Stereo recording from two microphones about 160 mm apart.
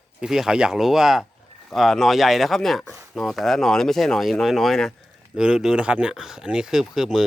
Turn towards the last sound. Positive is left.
turn(degrees=-5)  # may be behind; listen again after turning